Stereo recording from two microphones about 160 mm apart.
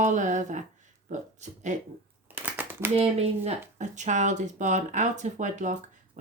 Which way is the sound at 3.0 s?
40° right (ahead or behind).